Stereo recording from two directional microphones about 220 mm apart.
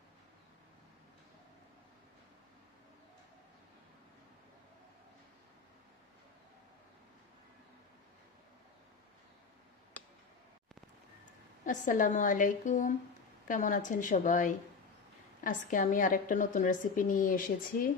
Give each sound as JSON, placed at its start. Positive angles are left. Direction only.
{"t": 11.6, "sound": "a woman's voice", "side_deg": 35}